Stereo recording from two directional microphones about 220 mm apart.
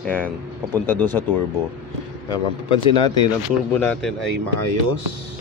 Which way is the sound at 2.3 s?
25° left (ahead or behind).